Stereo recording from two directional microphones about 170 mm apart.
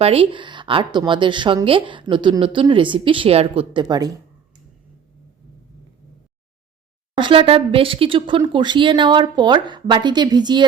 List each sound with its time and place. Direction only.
0.0 s a woman's voice: 35° right (ahead or behind)
7.2 s a woman's voice: 30° right (ahead or behind)